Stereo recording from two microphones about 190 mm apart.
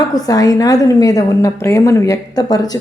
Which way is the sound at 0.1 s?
20° left (ahead or behind).